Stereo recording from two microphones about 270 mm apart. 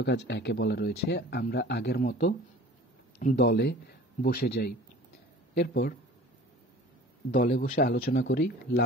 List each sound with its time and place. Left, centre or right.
0.0 s speech: left
7.2 s speech: left